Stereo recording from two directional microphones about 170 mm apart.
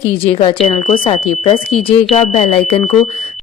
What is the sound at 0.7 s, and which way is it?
Speech, 35° left (ahead or behind).